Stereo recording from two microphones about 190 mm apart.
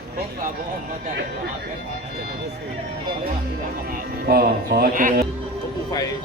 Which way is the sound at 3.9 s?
55° right (ahead or behind).